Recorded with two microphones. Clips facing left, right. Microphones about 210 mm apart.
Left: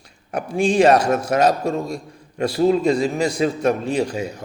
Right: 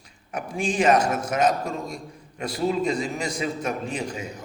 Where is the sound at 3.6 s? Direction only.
35° left (ahead or behind).